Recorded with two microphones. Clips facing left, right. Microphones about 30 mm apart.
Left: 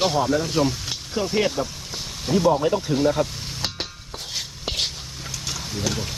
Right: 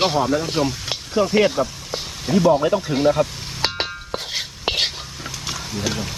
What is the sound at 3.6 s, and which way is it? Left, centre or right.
Whispering, right.